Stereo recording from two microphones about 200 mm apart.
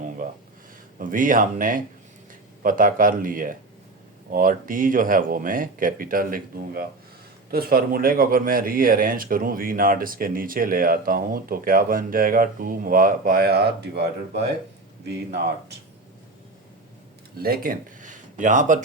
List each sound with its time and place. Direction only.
0.2 s a sound: 40° right (ahead or behind)
0.9 s speech: 40° right (ahead or behind)
17.4 s speech: 45° right (ahead or behind)